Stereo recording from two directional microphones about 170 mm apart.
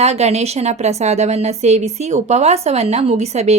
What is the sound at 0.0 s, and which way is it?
A woman's voice, 40° right (ahead or behind).